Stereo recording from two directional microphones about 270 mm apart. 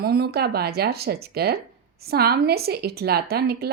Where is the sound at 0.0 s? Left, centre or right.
Right.